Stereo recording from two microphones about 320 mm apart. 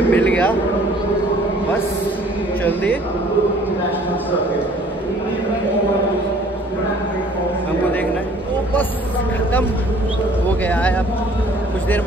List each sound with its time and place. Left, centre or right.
0.1 s speech: centre
2.6 s speech: centre
10.7 s speech: centre